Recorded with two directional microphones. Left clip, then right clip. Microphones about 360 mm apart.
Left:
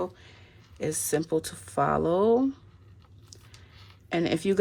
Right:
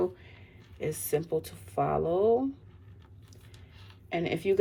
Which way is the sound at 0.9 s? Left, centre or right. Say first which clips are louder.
Left 2 dB; centre.